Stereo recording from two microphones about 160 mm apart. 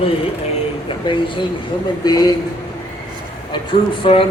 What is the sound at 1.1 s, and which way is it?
A man's voice, 30° left (ahead or behind).